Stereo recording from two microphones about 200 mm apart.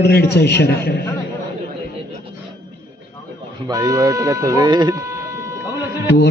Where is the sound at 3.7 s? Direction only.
15° right (ahead or behind).